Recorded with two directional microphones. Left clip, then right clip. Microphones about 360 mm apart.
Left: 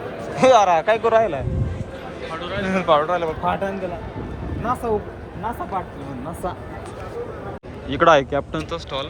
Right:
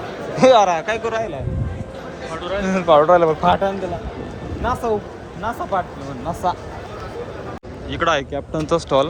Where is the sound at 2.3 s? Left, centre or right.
Centre.